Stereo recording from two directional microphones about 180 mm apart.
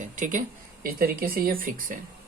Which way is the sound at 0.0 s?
45° right (ahead or behind).